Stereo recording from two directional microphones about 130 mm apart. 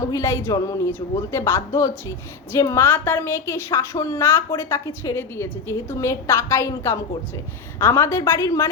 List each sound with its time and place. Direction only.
0.0 s speech: 25° left (ahead or behind)